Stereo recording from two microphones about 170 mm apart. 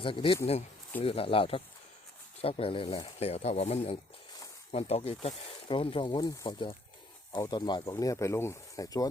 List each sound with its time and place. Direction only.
0.0 s speech: 30° left (ahead or behind)